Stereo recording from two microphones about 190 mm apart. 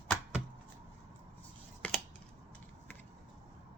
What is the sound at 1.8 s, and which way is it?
Scissors, 5° left (ahead or behind).